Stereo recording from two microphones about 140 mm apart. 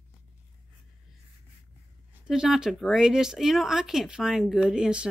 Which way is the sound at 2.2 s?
5° right (ahead or behind).